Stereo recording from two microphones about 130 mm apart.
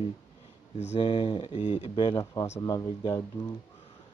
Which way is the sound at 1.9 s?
40° left (ahead or behind).